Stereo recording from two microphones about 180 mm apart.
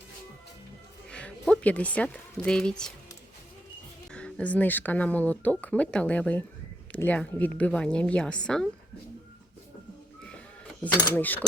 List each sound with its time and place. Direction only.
1.1 s speech: 5° left (ahead or behind)
4.1 s a woman's voice: 5° left (ahead or behind)
10.9 s speech: 20° left (ahead or behind)
11.2 s speech: 10° left (ahead or behind)